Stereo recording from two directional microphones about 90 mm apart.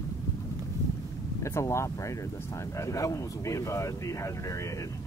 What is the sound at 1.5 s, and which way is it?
Speech, 30° left (ahead or behind).